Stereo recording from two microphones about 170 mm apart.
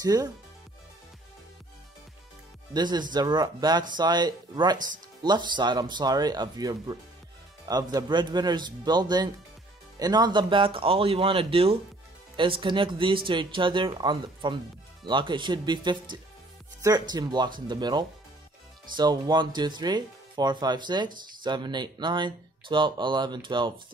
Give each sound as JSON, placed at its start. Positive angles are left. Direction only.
{"t": 0.0, "sound": "speech", "side_deg": -20}
{"t": 2.7, "sound": "speech", "side_deg": -25}